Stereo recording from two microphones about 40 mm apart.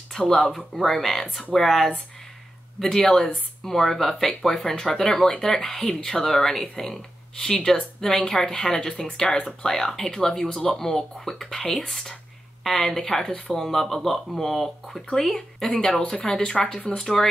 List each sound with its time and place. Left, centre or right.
0.3 s speech: centre